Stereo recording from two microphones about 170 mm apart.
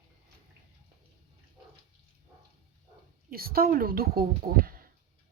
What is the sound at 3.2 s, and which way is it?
Speech, 60° right (ahead or behind).